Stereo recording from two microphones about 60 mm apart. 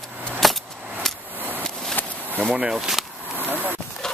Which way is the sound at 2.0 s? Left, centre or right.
Left.